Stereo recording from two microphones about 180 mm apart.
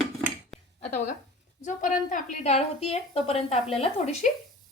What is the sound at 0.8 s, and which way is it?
A woman's voice, 40° left (ahead or behind).